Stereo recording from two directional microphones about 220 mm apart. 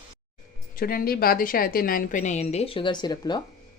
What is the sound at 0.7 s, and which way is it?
A woman's voice, 40° left (ahead or behind).